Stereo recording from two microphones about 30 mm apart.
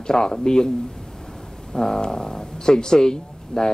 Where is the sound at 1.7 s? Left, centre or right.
Left.